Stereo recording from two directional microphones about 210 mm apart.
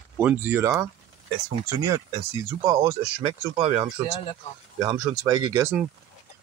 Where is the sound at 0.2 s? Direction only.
10° right (ahead or behind).